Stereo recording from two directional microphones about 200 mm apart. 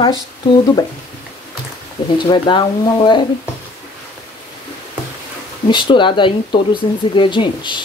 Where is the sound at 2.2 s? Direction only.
25° left (ahead or behind).